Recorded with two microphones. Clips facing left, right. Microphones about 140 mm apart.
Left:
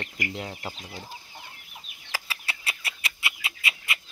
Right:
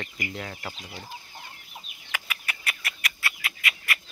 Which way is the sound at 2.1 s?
30° left (ahead or behind).